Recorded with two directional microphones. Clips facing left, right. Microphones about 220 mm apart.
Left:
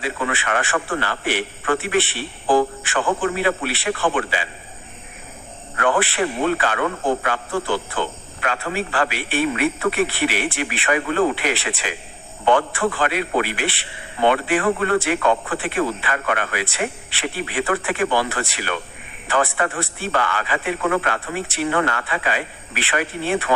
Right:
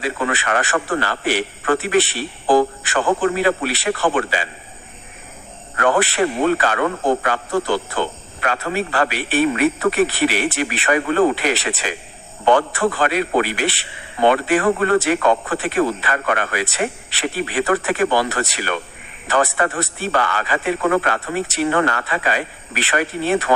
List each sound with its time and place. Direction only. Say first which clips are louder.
0.0 s a man's voice: right 3 dB; 40° right (ahead or behind)
5.7 s a man's voice: right 3 dB; 40° right (ahead or behind)